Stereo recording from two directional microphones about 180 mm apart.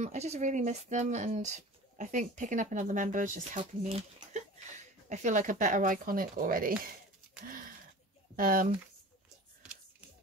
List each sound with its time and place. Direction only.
0.0 s speech: 40° right (ahead or behind)
8.4 s speech: 50° right (ahead or behind)